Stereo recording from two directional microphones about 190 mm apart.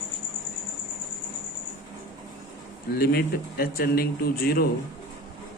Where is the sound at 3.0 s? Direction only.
55° left (ahead or behind).